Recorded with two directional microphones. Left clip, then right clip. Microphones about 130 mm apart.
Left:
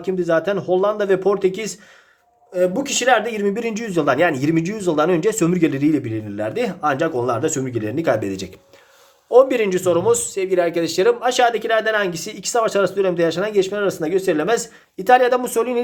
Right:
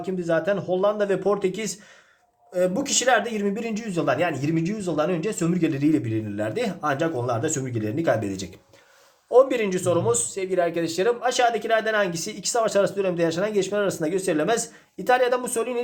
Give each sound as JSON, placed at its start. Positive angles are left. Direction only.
{"t": 0.0, "sound": "speech", "side_deg": 35}
{"t": 5.5, "sound": "speech", "side_deg": 40}